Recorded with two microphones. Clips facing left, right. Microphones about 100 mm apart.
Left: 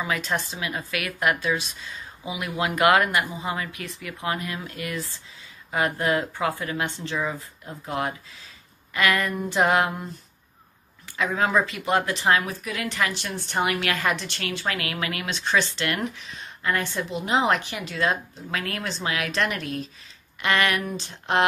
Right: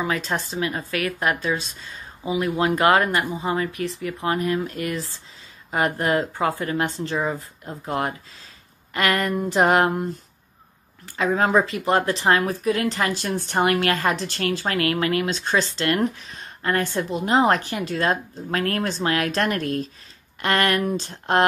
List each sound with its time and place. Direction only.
0.0 s speech: 35° right (ahead or behind)
11.1 s speech: 35° right (ahead or behind)